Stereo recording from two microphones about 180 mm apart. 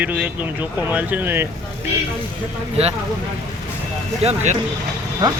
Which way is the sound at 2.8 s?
35° right (ahead or behind).